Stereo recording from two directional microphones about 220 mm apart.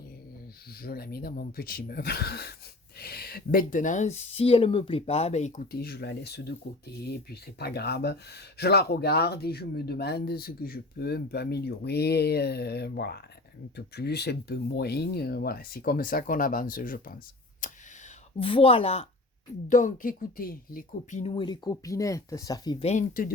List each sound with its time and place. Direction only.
0.7 s speech: 45° left (ahead or behind)
17.6 s a sound: 35° left (ahead or behind)
18.3 s speech: 25° left (ahead or behind)